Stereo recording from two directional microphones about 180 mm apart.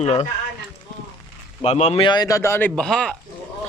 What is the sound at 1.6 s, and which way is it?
Speech, 35° left (ahead or behind).